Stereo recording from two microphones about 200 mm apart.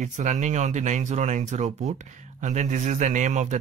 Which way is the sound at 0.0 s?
35° right (ahead or behind).